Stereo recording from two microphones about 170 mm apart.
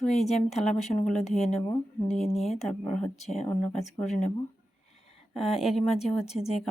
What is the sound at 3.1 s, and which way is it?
Speech, 40° left (ahead or behind).